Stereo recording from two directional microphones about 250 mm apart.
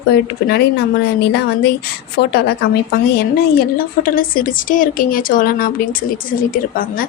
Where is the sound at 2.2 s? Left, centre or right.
Left.